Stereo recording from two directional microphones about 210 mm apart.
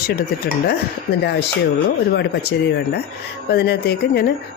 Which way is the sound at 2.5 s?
55° left (ahead or behind).